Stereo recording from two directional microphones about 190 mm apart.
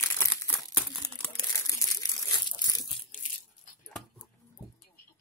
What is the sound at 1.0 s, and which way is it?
Crumpling, 20° left (ahead or behind).